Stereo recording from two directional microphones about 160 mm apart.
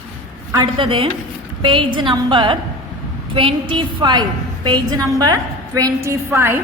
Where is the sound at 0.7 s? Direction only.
35° right (ahead or behind).